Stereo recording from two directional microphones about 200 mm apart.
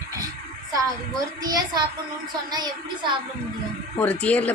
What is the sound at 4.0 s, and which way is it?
Speech, 5° left (ahead or behind).